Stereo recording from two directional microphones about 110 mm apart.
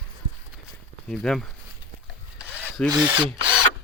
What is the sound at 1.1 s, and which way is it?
Speech, 5° left (ahead or behind).